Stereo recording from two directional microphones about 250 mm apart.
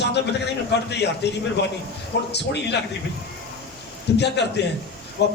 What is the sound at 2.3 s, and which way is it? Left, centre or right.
Speech, left.